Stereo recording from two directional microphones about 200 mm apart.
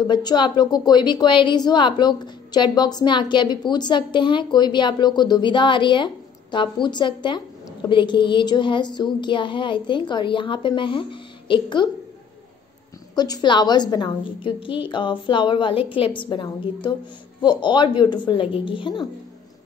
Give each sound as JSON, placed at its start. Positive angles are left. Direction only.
{"t": 0.0, "sound": "a woman's voice", "side_deg": 20}
{"t": 13.1, "sound": "a woman's voice", "side_deg": 20}